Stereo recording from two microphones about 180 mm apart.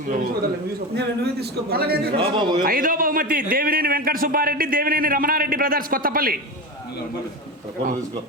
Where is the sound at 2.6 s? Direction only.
50° right (ahead or behind).